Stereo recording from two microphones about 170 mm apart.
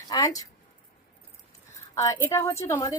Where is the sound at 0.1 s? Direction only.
20° left (ahead or behind).